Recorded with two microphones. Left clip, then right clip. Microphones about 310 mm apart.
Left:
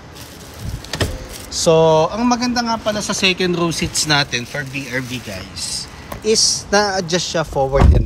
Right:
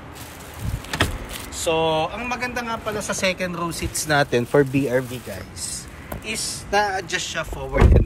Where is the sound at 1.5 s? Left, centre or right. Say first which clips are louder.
Left 9 dB; left.